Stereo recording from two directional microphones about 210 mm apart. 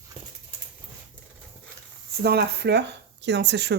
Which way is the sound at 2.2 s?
50° right (ahead or behind).